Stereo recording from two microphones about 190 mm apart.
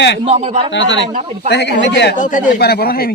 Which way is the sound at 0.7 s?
75° left (ahead or behind).